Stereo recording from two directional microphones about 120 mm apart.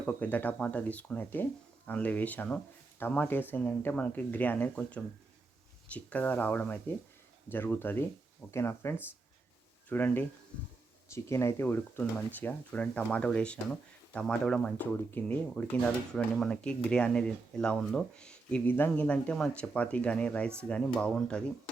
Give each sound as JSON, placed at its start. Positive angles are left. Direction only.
{"t": 0.0, "sound": "speech", "side_deg": 10}